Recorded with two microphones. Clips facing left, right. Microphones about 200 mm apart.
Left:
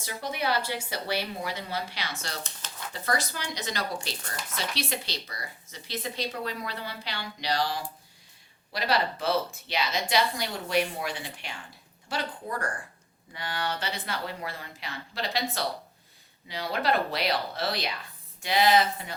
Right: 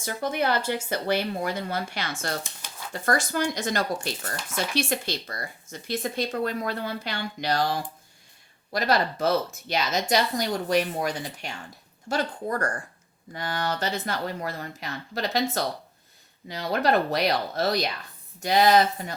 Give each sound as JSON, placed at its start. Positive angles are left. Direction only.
{"t": 0.0, "sound": "speech", "side_deg": -50}
{"t": 2.4, "sound": "speech", "side_deg": -10}
{"t": 2.9, "sound": "speech", "side_deg": -50}